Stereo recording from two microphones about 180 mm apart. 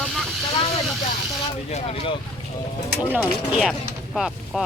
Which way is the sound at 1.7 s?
35° left (ahead or behind).